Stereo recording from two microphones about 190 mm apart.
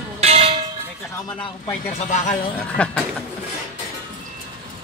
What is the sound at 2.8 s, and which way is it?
Speech, 5° left (ahead or behind).